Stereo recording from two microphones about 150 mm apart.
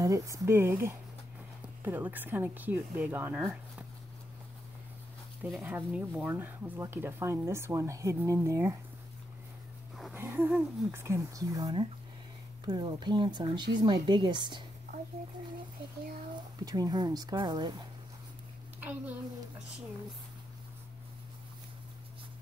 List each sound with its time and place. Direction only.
0.0 s speech: 20° right (ahead or behind)
5.4 s speech: 10° right (ahead or behind)
10.1 s speech: 15° right (ahead or behind); by 14.6 s 30° right (ahead or behind)
16.6 s speech: 25° right (ahead or behind)
18.8 s a child's voice: 10° right (ahead or behind)